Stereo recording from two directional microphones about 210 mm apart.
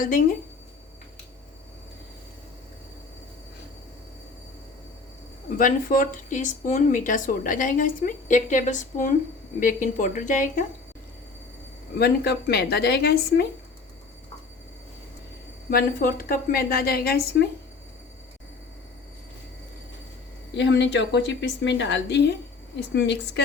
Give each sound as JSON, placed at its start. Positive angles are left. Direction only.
{"t": 0.0, "sound": "speech", "side_deg": 40}
{"t": 5.5, "sound": "speech", "side_deg": 40}
{"t": 11.9, "sound": "a woman's voice", "side_deg": 50}
{"t": 15.7, "sound": "a woman's voice", "side_deg": 45}
{"t": 20.5, "sound": "a woman's voice", "side_deg": 55}